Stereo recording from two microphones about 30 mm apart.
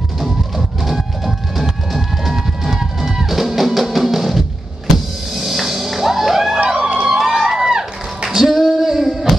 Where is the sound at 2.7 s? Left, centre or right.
Centre.